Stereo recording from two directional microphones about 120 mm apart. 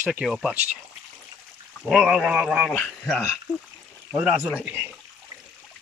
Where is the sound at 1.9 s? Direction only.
Centre (ahead or behind).